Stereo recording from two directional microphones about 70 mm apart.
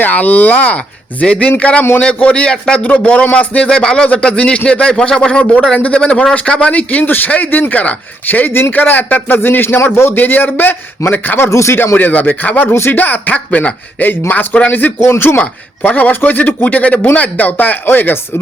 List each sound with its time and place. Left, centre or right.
0.0 s speech: left
11.9 s speech: left
15.0 s speech: left
15.8 s speech: left